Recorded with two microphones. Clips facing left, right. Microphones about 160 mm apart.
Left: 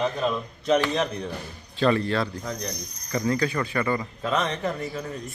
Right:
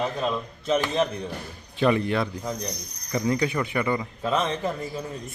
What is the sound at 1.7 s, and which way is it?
Speech, 15° right (ahead or behind).